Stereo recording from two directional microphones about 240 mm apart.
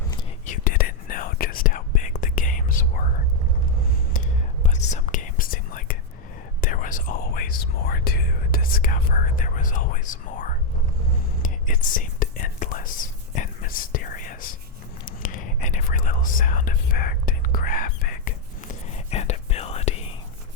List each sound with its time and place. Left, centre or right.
0.4 s whispering: left
4.6 s whispering: left